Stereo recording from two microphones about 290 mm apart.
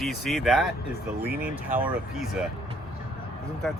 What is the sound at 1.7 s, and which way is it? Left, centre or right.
Speech, centre.